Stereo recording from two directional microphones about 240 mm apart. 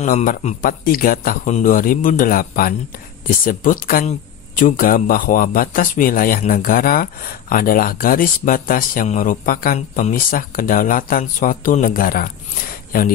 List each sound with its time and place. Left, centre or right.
0.0 s a man's voice: left